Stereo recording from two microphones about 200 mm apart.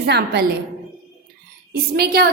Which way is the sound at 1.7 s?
50° right (ahead or behind).